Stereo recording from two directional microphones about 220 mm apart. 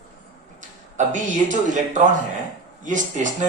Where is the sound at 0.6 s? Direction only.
35° right (ahead or behind).